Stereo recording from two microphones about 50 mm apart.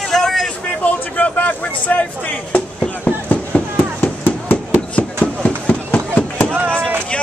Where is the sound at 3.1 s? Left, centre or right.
Left.